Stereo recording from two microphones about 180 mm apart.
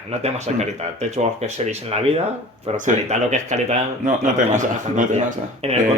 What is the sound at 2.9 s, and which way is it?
Speech, 40° right (ahead or behind).